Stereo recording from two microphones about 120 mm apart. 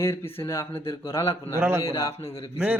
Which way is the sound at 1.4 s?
20° right (ahead or behind).